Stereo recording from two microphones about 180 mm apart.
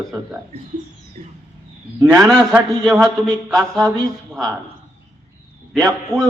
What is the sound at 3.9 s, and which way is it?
Speech, 20° right (ahead or behind).